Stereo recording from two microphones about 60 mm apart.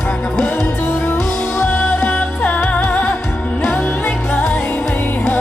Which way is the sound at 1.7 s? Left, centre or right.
Centre.